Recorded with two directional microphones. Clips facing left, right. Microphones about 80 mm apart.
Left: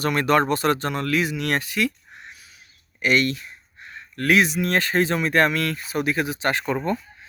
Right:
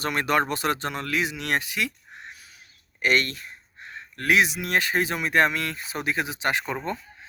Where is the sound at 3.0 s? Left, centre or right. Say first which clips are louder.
Left 3 dB; right.